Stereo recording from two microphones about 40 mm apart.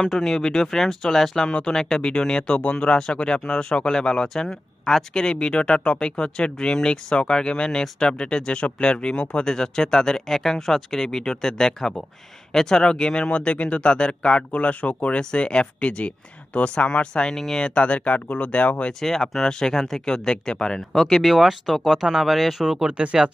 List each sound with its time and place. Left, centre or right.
0.0 s speech: centre; by 17.4 s left
17.4 s speech: centre
17.6 s speech: left
18.9 s speech: centre
21.3 s speech: centre